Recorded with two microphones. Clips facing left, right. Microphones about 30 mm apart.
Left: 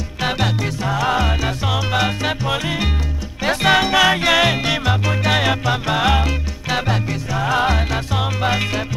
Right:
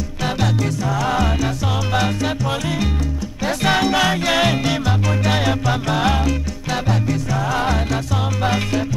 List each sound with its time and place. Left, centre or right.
0.2 s music: left